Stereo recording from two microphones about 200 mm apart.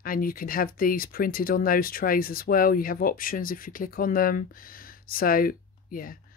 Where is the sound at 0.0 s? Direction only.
45° left (ahead or behind).